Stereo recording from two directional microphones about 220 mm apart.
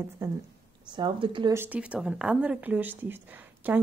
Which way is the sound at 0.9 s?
20° right (ahead or behind).